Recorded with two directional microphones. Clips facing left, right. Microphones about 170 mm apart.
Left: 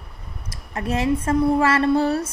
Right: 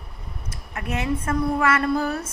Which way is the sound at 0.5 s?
30° left (ahead or behind).